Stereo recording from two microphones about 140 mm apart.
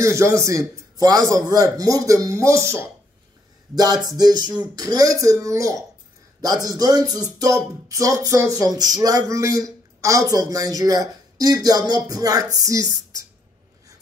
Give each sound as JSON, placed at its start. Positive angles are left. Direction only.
{"t": 0.0, "sound": "speech", "side_deg": -20}